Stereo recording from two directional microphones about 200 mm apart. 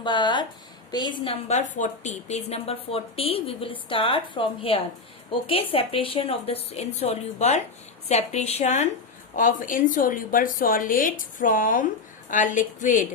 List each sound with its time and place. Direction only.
0.0 s a woman's voice: 25° left (ahead or behind); by 13.1 s 40° left (ahead or behind)